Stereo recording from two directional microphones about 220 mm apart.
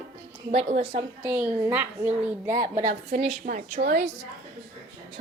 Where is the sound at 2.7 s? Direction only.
35° right (ahead or behind).